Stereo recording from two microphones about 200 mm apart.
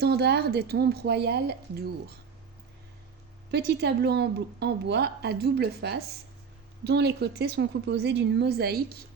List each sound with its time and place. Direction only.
0.0 s a woman's voice: 55° right (ahead or behind)
3.5 s a woman's voice: 55° right (ahead or behind)